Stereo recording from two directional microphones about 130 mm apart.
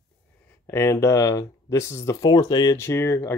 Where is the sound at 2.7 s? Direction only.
20° left (ahead or behind).